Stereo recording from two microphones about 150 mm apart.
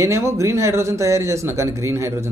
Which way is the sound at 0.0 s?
20° right (ahead or behind).